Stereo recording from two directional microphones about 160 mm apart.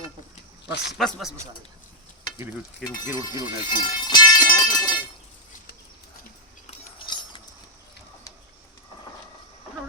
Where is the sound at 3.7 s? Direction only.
25° left (ahead or behind).